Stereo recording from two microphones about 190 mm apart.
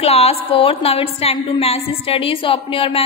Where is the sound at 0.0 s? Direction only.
30° left (ahead or behind).